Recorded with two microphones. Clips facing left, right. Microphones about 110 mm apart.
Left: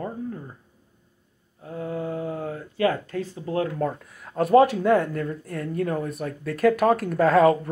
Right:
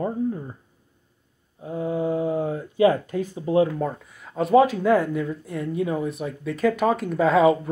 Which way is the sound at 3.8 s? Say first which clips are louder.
Left 1 dB; centre (ahead or behind).